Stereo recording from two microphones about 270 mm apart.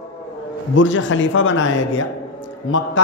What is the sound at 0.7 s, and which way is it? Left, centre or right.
A man's voice, left.